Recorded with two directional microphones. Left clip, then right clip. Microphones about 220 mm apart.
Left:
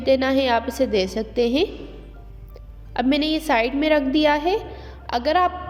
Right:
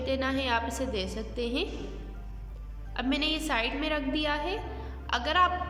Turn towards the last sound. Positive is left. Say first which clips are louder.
# left 6 dB
turn(degrees=25)  # may be behind; listen again after turning